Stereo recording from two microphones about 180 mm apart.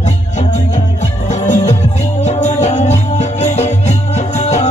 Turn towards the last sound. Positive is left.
turn(degrees=40)  # may be behind; listen again after turning